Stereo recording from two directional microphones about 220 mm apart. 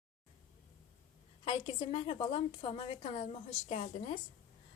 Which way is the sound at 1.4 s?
25° left (ahead or behind).